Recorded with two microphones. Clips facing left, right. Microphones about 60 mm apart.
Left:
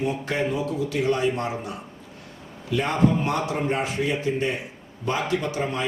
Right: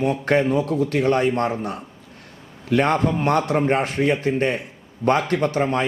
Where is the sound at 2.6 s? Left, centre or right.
Right.